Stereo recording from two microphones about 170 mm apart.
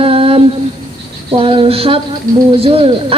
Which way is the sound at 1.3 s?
35° right (ahead or behind).